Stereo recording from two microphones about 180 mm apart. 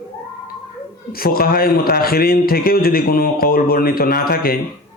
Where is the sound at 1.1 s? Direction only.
55° left (ahead or behind).